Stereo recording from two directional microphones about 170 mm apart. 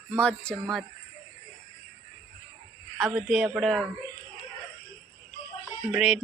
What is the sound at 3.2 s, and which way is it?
Speech, centre (ahead or behind).